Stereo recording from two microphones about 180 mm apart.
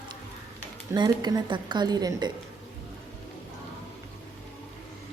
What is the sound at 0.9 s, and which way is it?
A woman's voice, 25° right (ahead or behind).